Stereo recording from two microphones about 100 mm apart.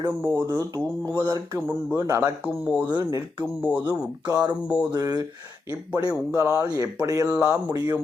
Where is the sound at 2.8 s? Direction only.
40° right (ahead or behind).